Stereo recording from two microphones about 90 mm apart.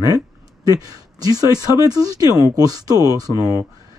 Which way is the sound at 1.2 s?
45° right (ahead or behind).